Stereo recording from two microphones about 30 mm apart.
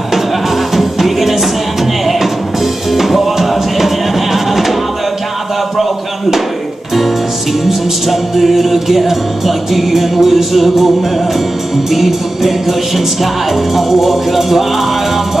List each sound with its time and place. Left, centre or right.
0.7 s music: centre
8.1 s music: centre